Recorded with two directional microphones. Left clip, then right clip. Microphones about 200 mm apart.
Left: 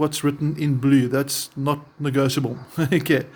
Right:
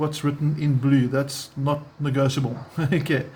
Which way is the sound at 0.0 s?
50° left (ahead or behind).